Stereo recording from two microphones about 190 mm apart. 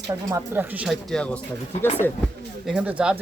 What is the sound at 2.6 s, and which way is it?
Speech, 5° right (ahead or behind).